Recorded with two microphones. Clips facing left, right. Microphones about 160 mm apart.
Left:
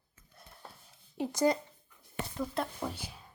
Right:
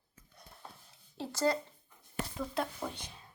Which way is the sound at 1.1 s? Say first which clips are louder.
Left 3 dB; 15° left (ahead or behind).